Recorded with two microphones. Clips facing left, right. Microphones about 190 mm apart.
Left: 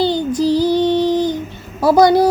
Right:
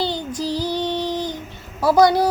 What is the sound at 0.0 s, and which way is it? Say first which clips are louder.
Child singing: left 8 dB; centre (ahead or behind).